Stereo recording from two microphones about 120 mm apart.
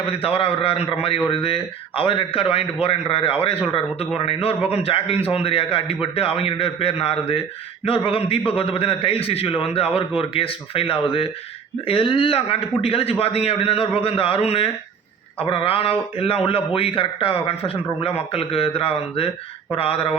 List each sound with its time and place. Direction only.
0.1 s a man's voice: 50° left (ahead or behind)